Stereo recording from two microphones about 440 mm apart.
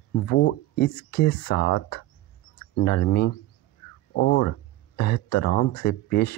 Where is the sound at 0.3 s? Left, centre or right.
Left.